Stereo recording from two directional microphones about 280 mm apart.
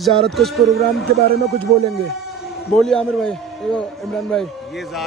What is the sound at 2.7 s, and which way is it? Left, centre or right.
A man's voice, centre.